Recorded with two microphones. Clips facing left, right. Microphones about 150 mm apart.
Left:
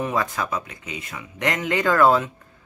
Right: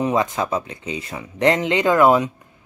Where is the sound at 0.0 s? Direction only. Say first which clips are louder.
Right 5 dB; 20° right (ahead or behind).